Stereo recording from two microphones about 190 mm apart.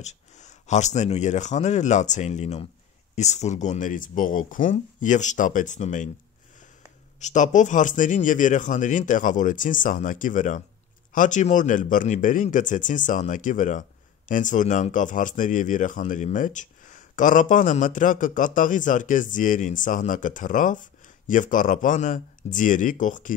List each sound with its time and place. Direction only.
0.0 s speech: 40° left (ahead or behind)
7.2 s speech: 40° left (ahead or behind)